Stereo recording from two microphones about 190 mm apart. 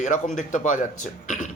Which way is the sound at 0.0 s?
40° left (ahead or behind).